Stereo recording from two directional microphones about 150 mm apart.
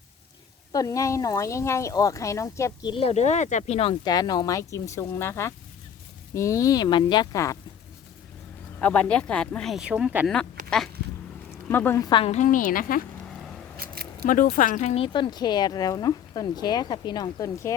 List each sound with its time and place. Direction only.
0.7 s speech: 25° left (ahead or behind)
2.9 s speech: 45° left (ahead or behind)
4.0 s speech: 25° left (ahead or behind)
8.8 s speech: 10° left (ahead or behind); by 10.2 s 10° right (ahead or behind)
11.7 s a woman's voice: 15° left (ahead or behind)
12.2 s a woman's voice: 50° left (ahead or behind); by 13.0 s 65° left (ahead or behind)
13.7 s a sound: 90° right
14.3 s speech: 65° left (ahead or behind); by 17.7 s 20° left (ahead or behind)